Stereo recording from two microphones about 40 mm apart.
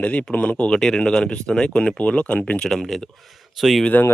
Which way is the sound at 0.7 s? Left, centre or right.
Centre.